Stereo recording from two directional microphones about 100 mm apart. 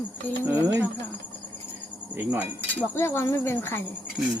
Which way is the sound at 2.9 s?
25° left (ahead or behind).